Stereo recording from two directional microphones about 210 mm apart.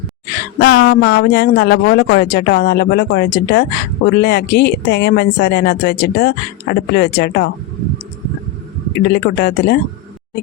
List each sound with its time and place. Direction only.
0.3 s a sound: 50° left (ahead or behind)
0.9 s speech: 50° left (ahead or behind)
9.0 s speech: 50° left (ahead or behind)